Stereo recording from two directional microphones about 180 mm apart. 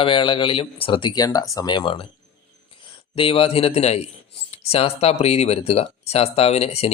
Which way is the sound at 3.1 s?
30° left (ahead or behind).